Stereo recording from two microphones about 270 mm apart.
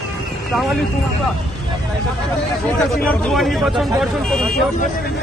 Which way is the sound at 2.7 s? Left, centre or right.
Centre.